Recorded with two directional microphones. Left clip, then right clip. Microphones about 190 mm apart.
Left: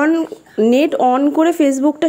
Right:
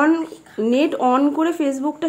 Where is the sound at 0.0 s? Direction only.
25° left (ahead or behind).